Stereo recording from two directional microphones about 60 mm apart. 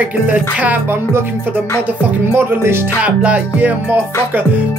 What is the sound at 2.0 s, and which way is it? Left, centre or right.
Speech, right.